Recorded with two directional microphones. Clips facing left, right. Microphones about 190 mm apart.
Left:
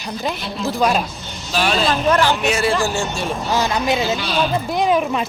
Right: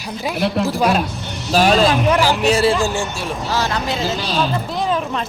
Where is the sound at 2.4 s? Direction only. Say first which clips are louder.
Right 4 dB; 35° right (ahead or behind).